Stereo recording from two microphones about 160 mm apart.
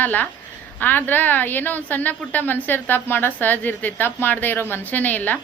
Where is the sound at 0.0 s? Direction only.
10° left (ahead or behind).